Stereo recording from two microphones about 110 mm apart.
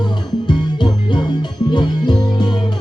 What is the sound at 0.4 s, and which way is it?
Music, 45° left (ahead or behind).